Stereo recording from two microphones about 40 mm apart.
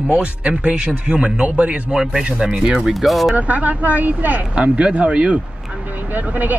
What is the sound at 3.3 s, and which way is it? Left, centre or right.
Speech, right.